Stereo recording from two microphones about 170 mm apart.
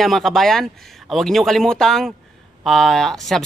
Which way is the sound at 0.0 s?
Centre (ahead or behind).